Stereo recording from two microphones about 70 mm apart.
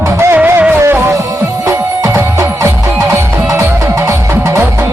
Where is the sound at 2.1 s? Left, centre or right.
Right.